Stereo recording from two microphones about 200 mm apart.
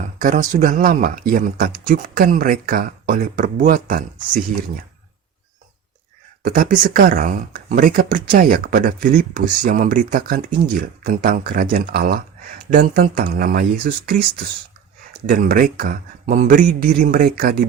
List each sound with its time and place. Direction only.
0.2 s speech: 40° right (ahead or behind)
6.4 s speech: 45° right (ahead or behind)